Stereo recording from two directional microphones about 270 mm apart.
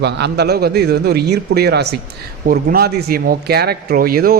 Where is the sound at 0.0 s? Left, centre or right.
Right.